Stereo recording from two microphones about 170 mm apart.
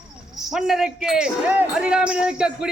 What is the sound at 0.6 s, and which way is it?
Speech, 5° right (ahead or behind).